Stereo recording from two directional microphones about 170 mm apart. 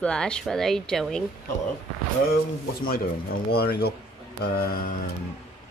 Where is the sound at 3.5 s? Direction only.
65° left (ahead or behind).